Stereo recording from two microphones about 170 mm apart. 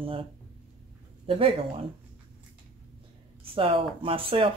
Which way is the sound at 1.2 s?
30° right (ahead or behind).